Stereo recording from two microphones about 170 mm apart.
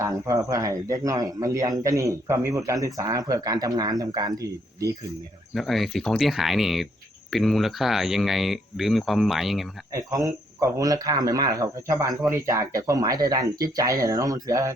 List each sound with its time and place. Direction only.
0.0 s speech: 20° right (ahead or behind)
5.5 s speech: centre (ahead or behind)
9.9 s speech: 20° right (ahead or behind)